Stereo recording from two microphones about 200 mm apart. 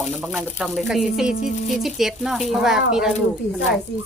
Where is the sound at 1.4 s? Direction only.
40° left (ahead or behind).